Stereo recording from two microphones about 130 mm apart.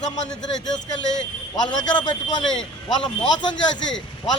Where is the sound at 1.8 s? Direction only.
35° left (ahead or behind).